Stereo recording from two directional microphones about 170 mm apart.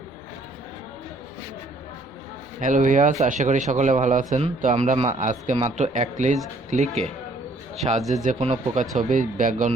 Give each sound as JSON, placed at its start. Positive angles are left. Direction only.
{"t": 2.6, "sound": "speech", "side_deg": -50}
{"t": 8.1, "sound": "speech", "side_deg": -45}